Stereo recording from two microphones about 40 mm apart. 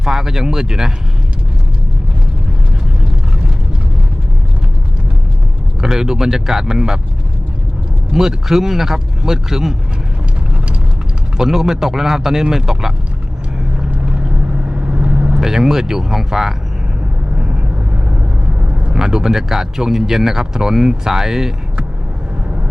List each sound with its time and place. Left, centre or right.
0.0 s speech: centre
5.8 s speech: centre
8.1 s speech: centre
11.3 s speech: centre
14.7 s vehicle: right
15.4 s speech: centre
17.3 s vehicle: right
18.9 s speech: centre